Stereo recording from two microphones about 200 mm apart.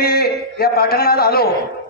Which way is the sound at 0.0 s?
50° left (ahead or behind).